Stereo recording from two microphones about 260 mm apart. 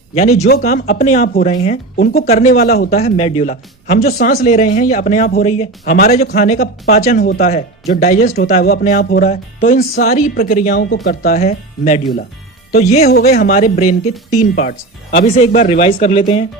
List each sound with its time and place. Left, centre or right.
0.3 s speech: left
3.0 s speech: left
13.1 s speech: left